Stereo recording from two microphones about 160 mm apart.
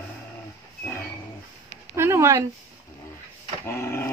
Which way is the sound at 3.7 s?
15° left (ahead or behind).